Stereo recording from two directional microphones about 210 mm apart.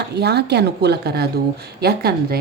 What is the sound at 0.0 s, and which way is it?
A woman's voice, 50° right (ahead or behind).